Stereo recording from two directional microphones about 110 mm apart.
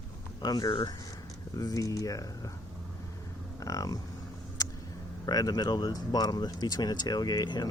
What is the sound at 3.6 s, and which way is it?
Speech, 30° left (ahead or behind).